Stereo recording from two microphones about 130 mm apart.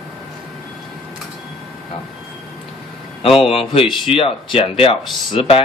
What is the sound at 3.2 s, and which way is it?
Speech, 45° left (ahead or behind).